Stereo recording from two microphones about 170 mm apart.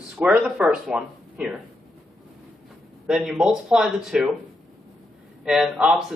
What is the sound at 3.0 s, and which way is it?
Speech, centre (ahead or behind).